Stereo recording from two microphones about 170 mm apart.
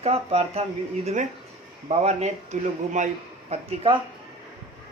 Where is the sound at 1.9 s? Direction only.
40° right (ahead or behind).